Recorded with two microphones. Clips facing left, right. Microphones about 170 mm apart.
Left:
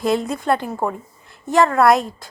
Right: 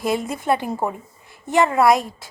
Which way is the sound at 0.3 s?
10° right (ahead or behind).